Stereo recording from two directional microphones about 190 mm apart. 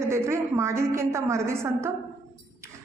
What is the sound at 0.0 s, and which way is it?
A woman's voice, 15° right (ahead or behind).